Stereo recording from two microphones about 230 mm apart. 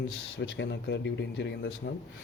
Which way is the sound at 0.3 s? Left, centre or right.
Left.